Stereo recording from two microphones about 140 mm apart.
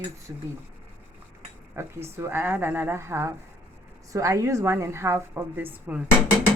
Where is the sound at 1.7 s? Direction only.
20° right (ahead or behind).